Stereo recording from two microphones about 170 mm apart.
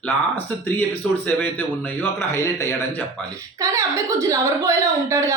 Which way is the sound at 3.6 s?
20° right (ahead or behind).